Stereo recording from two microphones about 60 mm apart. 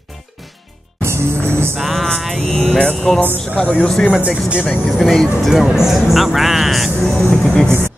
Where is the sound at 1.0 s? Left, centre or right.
Right.